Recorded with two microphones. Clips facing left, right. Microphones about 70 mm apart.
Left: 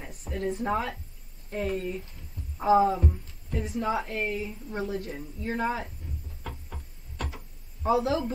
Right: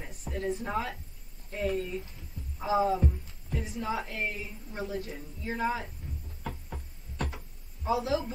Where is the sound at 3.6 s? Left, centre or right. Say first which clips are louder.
Left 5 dB; left.